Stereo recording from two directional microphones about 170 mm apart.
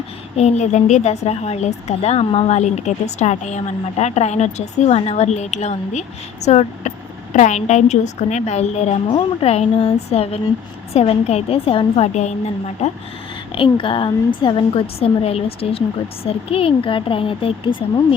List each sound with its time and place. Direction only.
0.3 s speech: 40° left (ahead or behind)
13.6 s speech: 30° left (ahead or behind)